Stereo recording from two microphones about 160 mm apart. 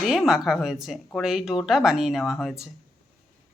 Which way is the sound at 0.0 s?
Centre (ahead or behind).